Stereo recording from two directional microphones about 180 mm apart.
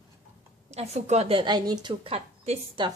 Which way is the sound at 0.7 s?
35° right (ahead or behind).